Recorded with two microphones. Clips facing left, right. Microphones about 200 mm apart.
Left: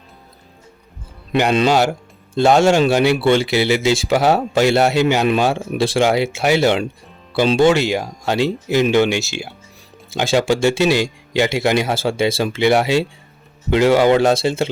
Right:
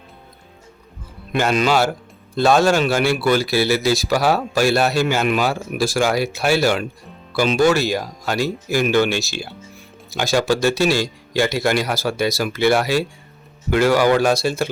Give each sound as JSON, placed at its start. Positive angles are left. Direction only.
{"t": 1.5, "sound": "speech", "side_deg": 20}